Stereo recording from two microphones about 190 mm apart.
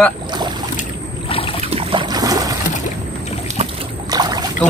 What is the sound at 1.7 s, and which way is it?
Boat, 25° right (ahead or behind).